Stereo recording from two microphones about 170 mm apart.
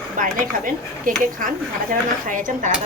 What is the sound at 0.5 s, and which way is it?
Speech, 55° right (ahead or behind).